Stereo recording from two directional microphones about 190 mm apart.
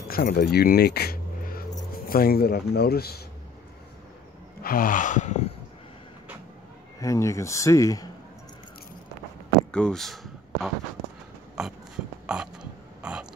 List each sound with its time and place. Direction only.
0.1 s speech: 55° left (ahead or behind)
4.6 s gasp: 45° left (ahead or behind)
7.0 s speech: 15° left (ahead or behind)
9.7 s a sound: 5° left (ahead or behind)
12.3 s burping: 5° right (ahead or behind)